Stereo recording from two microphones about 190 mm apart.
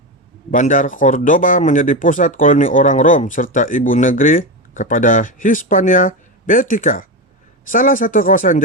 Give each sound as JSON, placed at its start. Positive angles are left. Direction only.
{"t": 0.5, "sound": "speech", "side_deg": 45}